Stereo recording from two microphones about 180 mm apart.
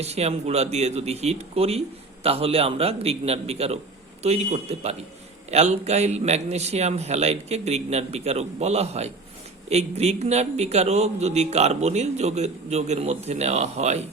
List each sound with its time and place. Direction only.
0.0 s a man's voice: 35° right (ahead or behind)